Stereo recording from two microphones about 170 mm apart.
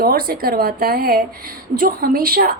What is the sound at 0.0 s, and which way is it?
A woman's voice, 60° right (ahead or behind).